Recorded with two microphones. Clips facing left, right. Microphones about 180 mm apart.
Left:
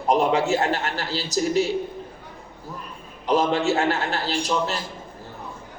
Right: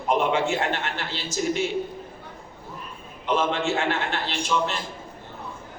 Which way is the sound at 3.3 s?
40° left (ahead or behind).